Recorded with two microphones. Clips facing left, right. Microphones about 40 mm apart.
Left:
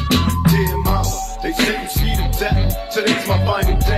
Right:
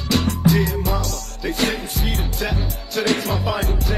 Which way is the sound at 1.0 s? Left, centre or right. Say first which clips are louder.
Left 5 dB; left.